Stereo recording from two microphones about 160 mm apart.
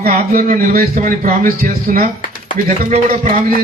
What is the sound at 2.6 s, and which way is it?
Speech, 45° right (ahead or behind).